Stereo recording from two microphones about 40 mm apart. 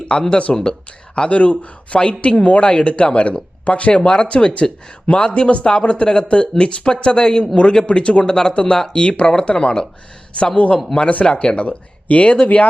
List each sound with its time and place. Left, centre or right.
0.1 s speech: left
8.3 s speech: centre
9.0 s speech: left